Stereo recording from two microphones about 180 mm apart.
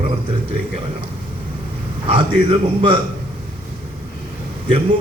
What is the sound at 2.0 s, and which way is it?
Speech, 30° right (ahead or behind).